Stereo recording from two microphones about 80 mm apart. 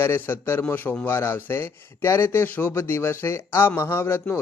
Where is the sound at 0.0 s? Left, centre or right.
Left.